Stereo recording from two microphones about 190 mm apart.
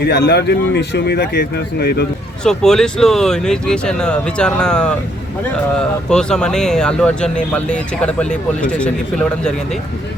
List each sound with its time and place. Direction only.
0.0 s speech: 55° left (ahead or behind)
2.4 s speech: 5° left (ahead or behind)